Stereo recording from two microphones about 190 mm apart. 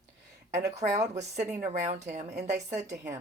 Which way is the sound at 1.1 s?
35° right (ahead or behind).